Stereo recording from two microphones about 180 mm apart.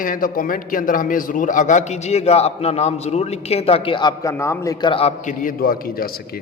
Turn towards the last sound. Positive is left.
turn(degrees=55)  # may be behind; listen again after turning